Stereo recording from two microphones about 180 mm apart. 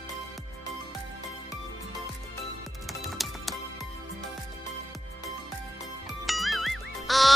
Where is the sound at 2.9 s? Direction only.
Centre (ahead or behind).